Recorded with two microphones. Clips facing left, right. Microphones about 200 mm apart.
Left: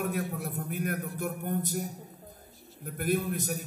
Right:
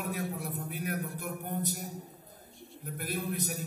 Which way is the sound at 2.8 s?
50° left (ahead or behind).